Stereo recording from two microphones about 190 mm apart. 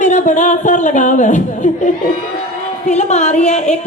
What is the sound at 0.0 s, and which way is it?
Speech, 40° left (ahead or behind).